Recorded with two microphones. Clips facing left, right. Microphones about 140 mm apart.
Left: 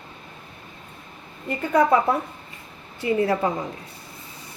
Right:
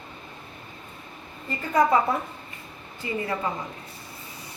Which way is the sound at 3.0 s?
80° left.